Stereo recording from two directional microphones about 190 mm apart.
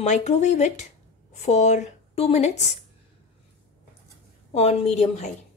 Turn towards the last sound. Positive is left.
turn(degrees=35)  # may be behind; listen again after turning